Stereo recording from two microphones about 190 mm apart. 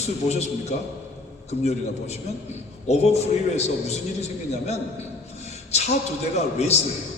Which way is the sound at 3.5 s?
35° left (ahead or behind).